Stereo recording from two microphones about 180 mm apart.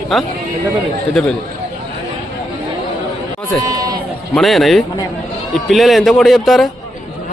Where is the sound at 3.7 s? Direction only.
20° right (ahead or behind).